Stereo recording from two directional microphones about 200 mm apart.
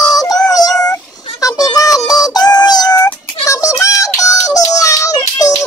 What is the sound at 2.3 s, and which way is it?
Synthetic singing, 20° left (ahead or behind).